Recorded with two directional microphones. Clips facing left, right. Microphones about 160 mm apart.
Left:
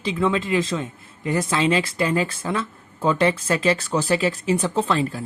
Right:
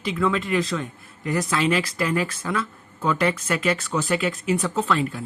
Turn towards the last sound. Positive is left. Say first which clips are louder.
# left 2 dB
turn(degrees=30)  # may be behind; listen again after turning